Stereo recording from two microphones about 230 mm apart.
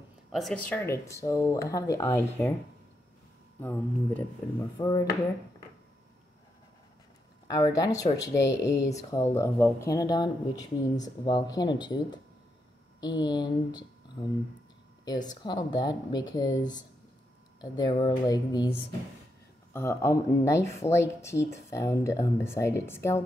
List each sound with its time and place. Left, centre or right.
0.3 s speech: centre
3.6 s speech: centre
7.7 s speech: centre